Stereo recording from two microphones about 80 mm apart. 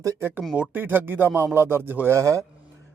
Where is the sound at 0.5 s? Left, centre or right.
Centre.